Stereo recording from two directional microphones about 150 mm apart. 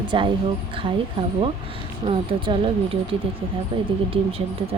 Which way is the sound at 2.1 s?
35° right (ahead or behind).